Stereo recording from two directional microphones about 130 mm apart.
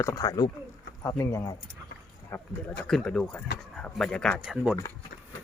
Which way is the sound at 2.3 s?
10° left (ahead or behind).